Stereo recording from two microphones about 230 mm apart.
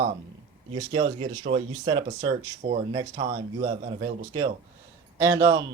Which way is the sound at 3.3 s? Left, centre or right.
Centre.